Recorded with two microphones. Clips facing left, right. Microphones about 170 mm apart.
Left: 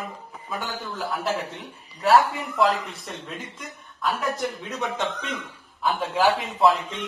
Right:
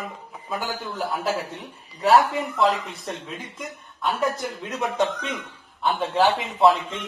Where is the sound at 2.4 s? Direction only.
Centre (ahead or behind).